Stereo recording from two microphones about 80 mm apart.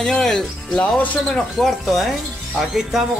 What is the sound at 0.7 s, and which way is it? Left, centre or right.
Speech, centre.